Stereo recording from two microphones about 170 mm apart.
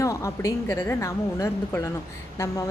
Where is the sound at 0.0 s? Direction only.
20° left (ahead or behind).